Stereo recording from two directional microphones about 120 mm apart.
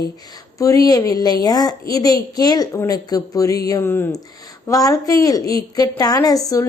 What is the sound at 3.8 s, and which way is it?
Speech, 20° left (ahead or behind).